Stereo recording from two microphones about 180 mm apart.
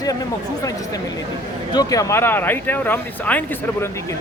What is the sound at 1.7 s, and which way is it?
Speech, 20° left (ahead or behind).